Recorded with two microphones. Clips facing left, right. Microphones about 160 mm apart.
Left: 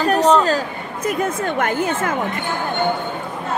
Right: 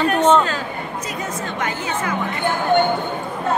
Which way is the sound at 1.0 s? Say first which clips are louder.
Left 11 dB; 55° left (ahead or behind).